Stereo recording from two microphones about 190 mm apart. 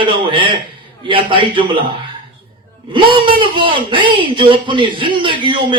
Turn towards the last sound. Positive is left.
turn(degrees=-25)  # may be behind; listen again after turning